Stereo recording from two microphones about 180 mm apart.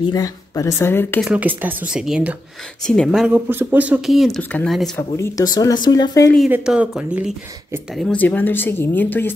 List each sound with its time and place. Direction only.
0.1 s speech: 20° left (ahead or behind)
1.2 s speech: 5° right (ahead or behind)
4.9 s speech: 15° left (ahead or behind)
6.5 s speech: 5° right (ahead or behind); by 9.3 s 10° left (ahead or behind)